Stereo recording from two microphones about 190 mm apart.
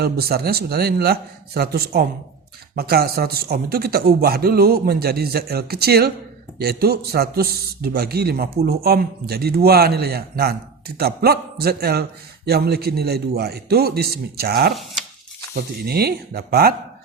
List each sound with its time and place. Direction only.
0.0 s a man's voice: 55° right (ahead or behind)